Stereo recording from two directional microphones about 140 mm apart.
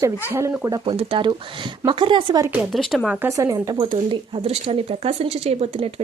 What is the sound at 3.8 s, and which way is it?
Speech, 35° right (ahead or behind).